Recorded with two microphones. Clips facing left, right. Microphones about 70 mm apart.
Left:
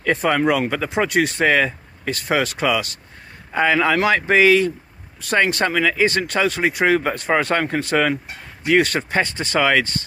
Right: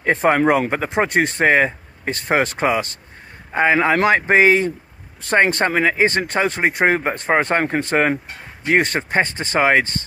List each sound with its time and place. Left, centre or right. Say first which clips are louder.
0.0 s speech: right 2 dB; right